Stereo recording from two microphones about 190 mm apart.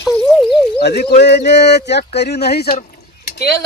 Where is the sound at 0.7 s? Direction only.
60° left (ahead or behind).